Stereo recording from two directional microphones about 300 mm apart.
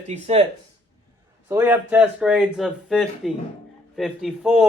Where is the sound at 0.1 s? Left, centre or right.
Right.